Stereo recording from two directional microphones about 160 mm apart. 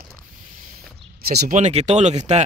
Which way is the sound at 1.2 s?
70° right (ahead or behind).